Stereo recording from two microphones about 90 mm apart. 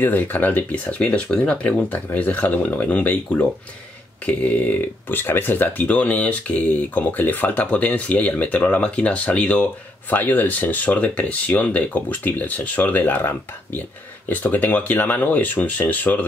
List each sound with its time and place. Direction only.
0.0 s speech: 20° left (ahead or behind)
14.3 s speech: 20° left (ahead or behind)